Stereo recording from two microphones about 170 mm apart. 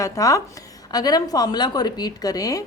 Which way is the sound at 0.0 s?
20° left (ahead or behind).